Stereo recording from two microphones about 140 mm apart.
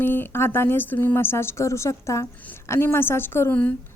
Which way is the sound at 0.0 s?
15° left (ahead or behind).